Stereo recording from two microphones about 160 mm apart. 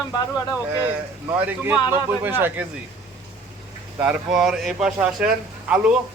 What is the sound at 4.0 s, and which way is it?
A man's voice, 5° right (ahead or behind).